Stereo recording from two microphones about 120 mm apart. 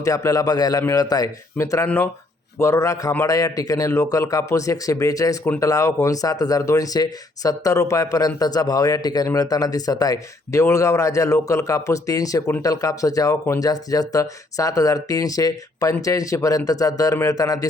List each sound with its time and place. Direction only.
0.0 s a man's voice: 30° left (ahead or behind)